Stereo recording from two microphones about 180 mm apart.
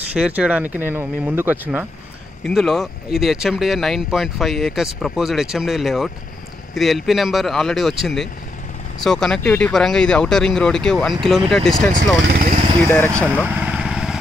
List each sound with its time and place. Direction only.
0.1 s speech: 5° right (ahead or behind)
2.4 s speech: 5° left (ahead or behind)
11.9 s speech: 50° right (ahead or behind)
12.8 s speech: 10° left (ahead or behind)
13.5 s vehicle: 5° right (ahead or behind)